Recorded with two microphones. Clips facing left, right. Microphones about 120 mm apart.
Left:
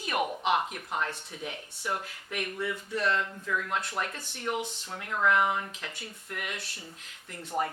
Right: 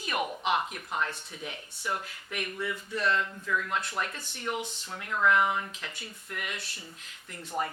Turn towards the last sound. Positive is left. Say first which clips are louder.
# left 2 dB
turn(degrees=25)  # may be behind; listen again after turning